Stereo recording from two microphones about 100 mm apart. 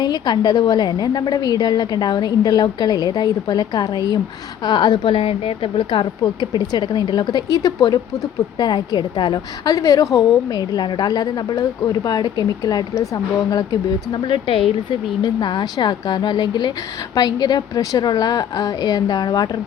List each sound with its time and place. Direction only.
0.0 s a woman's voice: 45° left (ahead or behind)
9.7 s speech: 35° left (ahead or behind)
14.1 s a woman's voice: 60° left (ahead or behind); by 19.5 s 45° left (ahead or behind)